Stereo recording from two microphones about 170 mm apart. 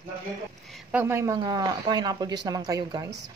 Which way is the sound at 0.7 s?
10° right (ahead or behind).